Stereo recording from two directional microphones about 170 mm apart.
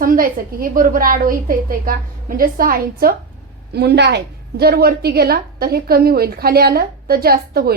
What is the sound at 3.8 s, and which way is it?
A woman's voice, 75° right (ahead or behind).